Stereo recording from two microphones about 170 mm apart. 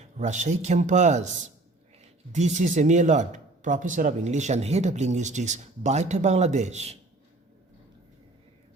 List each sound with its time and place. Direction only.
0.0 s speech: 45° right (ahead or behind)
2.3 s speech: 45° right (ahead or behind)